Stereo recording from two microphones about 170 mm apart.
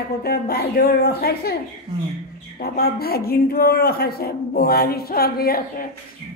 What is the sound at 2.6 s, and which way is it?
Speech, 65° left (ahead or behind).